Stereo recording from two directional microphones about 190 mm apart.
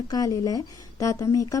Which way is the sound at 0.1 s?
20° left (ahead or behind).